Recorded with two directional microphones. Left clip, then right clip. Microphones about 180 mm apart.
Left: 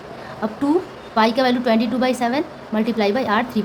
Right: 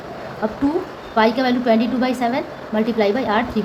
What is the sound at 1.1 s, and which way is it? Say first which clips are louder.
A woman's voice: even; 35° left (ahead or behind).